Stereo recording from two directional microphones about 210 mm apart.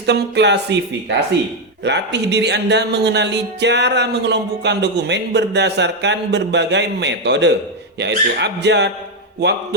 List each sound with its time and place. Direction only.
0.0 s speech: 55° right (ahead or behind)
1.8 s speech: 55° right (ahead or behind)